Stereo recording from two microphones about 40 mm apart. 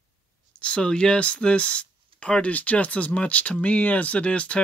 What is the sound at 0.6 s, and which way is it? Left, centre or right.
Speech, left.